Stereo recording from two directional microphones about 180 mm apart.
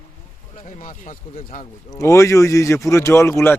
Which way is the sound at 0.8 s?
45° left (ahead or behind).